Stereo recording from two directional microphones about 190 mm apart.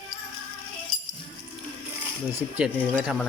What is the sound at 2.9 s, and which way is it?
Speech, 5° right (ahead or behind).